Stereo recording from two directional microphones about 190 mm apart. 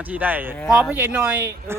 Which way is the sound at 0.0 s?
10° right (ahead or behind).